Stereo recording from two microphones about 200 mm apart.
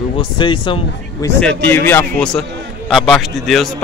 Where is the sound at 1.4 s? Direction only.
5° left (ahead or behind).